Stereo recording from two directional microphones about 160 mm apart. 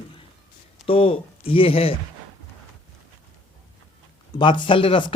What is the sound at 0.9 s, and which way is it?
Speech, 35° left (ahead or behind).